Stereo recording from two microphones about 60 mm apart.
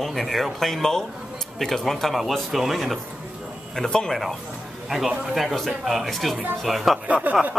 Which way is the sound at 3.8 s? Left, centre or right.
Centre.